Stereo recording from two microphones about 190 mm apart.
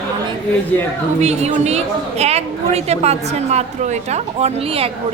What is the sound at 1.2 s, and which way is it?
A woman's voice, 35° right (ahead or behind).